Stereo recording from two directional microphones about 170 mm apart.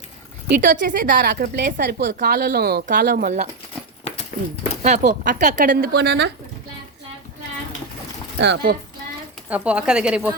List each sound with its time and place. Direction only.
0.4 s a woman's voice: 60° right (ahead or behind); by 2.1 s 80° right
2.2 s a woman's voice: 65° right (ahead or behind)
3.2 s speech: 45° right (ahead or behind)
4.1 s horse: 35° left (ahead or behind)
4.8 s a woman's voice: 40° right (ahead or behind); by 6.3 s 75° right (ahead or behind)
8.4 s speech: 90° right
9.5 s a woman's voice: 5° right (ahead or behind)